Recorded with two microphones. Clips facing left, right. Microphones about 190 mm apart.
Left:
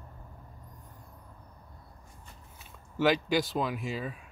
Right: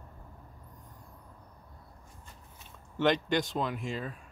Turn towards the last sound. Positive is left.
turn(degrees=5)  # may be behind; listen again after turning